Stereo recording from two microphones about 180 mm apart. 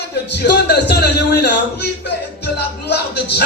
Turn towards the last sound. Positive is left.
turn(degrees=65)  # may be behind; listen again after turning